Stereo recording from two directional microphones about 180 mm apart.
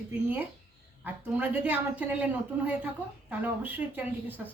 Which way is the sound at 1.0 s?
10° right (ahead or behind).